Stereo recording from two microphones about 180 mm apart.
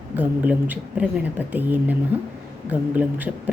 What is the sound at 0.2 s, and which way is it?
Speech, 10° right (ahead or behind).